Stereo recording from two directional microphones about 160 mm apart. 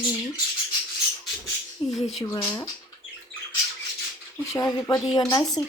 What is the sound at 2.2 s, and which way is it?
Speech, 20° left (ahead or behind).